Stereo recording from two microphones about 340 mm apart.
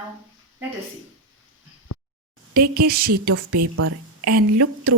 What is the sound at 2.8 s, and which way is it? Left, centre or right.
Speech, right.